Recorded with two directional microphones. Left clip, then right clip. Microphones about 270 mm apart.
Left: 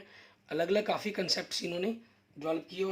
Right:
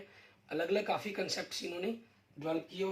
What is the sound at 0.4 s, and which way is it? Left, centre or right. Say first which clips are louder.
Speech: left 3 dB; left.